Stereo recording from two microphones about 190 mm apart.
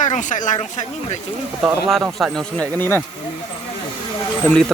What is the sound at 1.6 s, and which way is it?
Speech, 5° right (ahead or behind).